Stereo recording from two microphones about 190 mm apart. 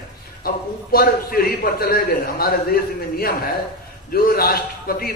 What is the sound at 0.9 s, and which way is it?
A man's voice, 50° left (ahead or behind).